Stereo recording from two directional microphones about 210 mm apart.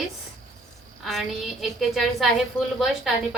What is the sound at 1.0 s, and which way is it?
A woman's voice, centre (ahead or behind).